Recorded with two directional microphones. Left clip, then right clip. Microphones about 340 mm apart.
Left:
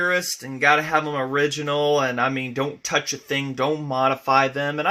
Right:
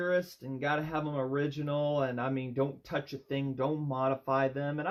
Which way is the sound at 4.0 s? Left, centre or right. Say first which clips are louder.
Left 12 dB; left.